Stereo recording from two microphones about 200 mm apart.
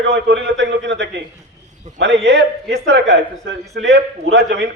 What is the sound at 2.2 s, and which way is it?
A man's voice, 60° right (ahead or behind).